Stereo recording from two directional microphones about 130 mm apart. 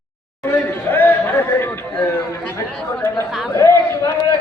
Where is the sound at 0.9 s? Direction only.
15° left (ahead or behind).